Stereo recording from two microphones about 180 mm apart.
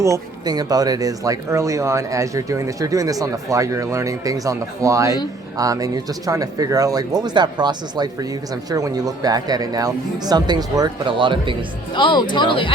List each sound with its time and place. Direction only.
0.0 s speech: 20° right (ahead or behind)
11.9 s speech: 25° left (ahead or behind)